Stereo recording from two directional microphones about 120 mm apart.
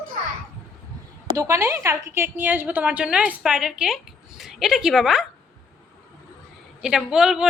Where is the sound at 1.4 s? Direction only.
25° right (ahead or behind); by 5.2 s 5° right (ahead or behind).